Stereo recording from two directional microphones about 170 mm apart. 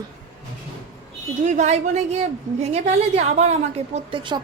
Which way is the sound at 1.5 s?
45° right (ahead or behind).